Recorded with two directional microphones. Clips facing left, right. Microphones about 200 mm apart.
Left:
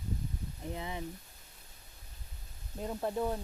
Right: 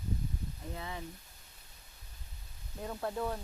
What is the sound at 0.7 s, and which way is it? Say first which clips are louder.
Speech: left 3 dB; 20° left (ahead or behind).